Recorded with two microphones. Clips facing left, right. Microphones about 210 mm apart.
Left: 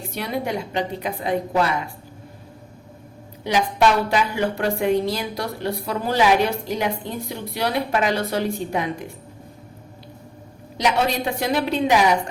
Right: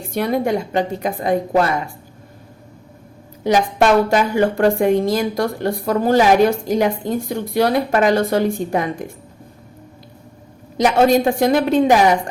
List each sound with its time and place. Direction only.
0.1 s a woman's voice: 50° right (ahead or behind)
3.4 s a woman's voice: 45° right (ahead or behind)
10.8 s a woman's voice: 50° right (ahead or behind)